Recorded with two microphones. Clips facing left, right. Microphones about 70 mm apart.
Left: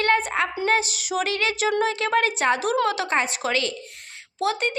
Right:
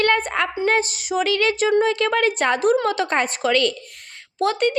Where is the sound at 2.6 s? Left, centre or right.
Right.